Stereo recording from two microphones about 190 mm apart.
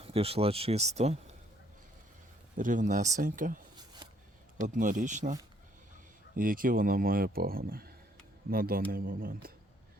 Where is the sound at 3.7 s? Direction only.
20° right (ahead or behind).